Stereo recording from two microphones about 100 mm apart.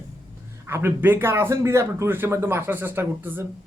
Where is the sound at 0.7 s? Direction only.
25° right (ahead or behind).